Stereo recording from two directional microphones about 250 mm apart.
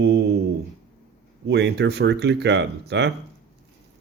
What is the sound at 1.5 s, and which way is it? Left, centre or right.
Speech, right.